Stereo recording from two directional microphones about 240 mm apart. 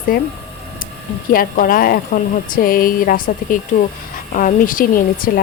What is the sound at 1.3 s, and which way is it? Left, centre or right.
A woman's voice, left.